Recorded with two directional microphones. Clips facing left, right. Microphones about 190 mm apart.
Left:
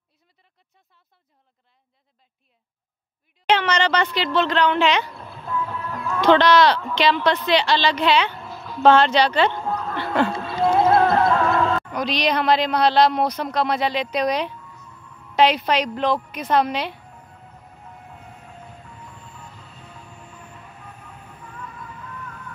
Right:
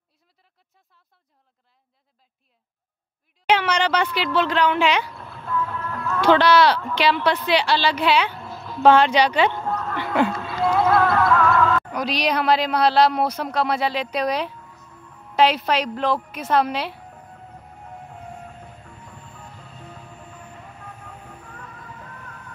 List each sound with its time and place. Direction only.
3.4 s speech: 10° right (ahead or behind)
5.4 s music: 10° left (ahead or behind)
6.2 s speech: 10° right (ahead or behind)
9.7 s a sound: 10° left (ahead or behind)
9.9 s a sound: 10° right (ahead or behind)
10.3 s music: 25° left (ahead or behind)
11.9 s speech: 10° right (ahead or behind)